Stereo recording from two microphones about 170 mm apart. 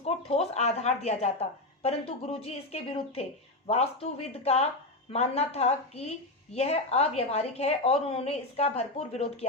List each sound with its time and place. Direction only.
0.0 s a woman's voice: 35° left (ahead or behind)